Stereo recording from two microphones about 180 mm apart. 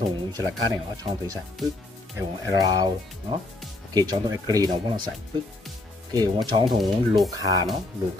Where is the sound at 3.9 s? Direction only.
20° right (ahead or behind).